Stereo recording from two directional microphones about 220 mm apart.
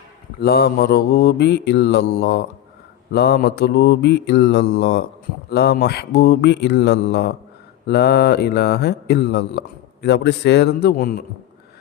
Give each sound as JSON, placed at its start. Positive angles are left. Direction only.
{"t": 0.4, "sound": "speech", "side_deg": 45}